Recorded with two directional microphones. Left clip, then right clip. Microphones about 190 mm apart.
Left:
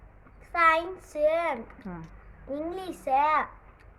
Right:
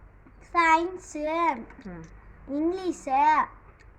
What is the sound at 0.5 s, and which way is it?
A child's voice, 15° left (ahead or behind).